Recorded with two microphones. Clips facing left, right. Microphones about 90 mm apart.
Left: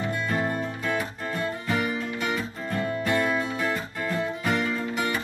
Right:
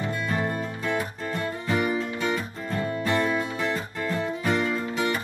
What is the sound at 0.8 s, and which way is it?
Music, 30° right (ahead or behind).